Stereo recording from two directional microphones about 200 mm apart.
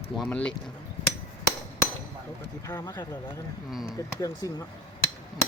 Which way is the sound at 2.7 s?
20° left (ahead or behind).